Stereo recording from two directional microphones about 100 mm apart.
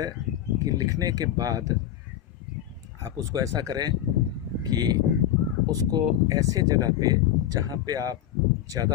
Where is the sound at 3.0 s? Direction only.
35° right (ahead or behind).